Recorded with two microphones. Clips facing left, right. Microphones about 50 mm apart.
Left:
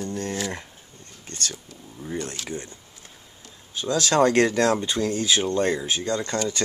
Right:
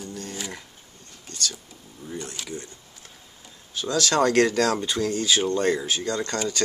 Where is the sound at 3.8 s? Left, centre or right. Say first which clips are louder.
Left 2 dB; centre.